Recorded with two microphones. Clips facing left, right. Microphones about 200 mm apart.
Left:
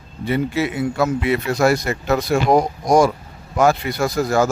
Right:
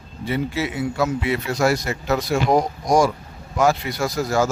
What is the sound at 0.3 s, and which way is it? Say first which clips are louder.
A man's voice: left 4 dB; 55° left (ahead or behind).